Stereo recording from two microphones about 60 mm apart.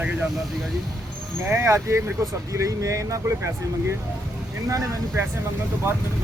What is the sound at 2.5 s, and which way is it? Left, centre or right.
Speech, right.